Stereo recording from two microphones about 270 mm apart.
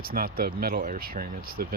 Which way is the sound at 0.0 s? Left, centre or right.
Right.